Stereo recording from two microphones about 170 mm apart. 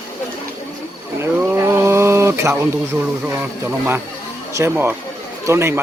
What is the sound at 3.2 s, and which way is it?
Speech, 10° right (ahead or behind).